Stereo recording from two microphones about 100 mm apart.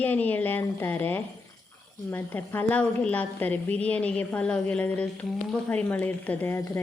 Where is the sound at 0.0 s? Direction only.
15° left (ahead or behind).